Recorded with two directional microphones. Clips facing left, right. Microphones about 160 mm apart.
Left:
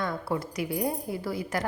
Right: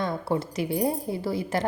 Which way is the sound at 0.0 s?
25° right (ahead or behind).